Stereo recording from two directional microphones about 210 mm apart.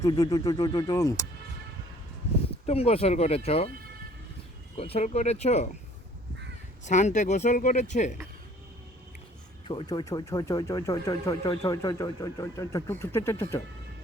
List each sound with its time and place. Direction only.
0.0 s speech: 15° left (ahead or behind)
2.6 s speech: 30° left (ahead or behind)
4.8 s speech: 30° left (ahead or behind)
6.8 s speech: 35° left (ahead or behind)
9.6 s speech: 20° left (ahead or behind)